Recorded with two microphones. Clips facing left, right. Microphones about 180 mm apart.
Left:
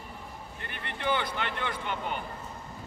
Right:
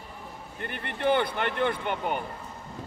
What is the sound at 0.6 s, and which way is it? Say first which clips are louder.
Speech: right 6 dB; 50° right (ahead or behind).